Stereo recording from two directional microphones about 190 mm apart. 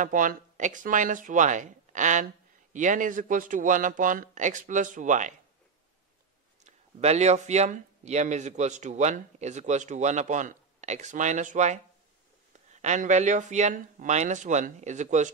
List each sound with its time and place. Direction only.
0.0 s speech: 45° right (ahead or behind)
6.6 s speech: 35° right (ahead or behind)
12.8 s speech: 40° right (ahead or behind)